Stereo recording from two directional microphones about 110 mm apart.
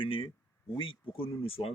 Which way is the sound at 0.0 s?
55° left (ahead or behind).